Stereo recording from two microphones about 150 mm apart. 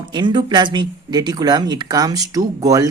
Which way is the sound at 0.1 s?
30° right (ahead or behind).